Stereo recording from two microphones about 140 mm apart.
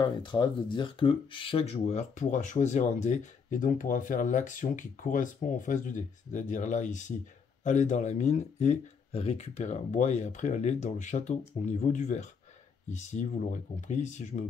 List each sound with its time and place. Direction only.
0.0 s speech: 30° left (ahead or behind); by 14.4 s 60° left (ahead or behind)